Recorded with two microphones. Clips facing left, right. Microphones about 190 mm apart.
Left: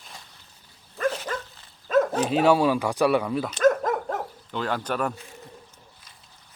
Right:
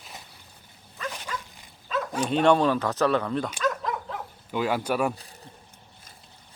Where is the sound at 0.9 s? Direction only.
50° left (ahead or behind).